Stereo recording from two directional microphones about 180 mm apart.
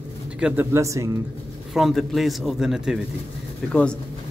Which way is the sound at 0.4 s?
10° right (ahead or behind).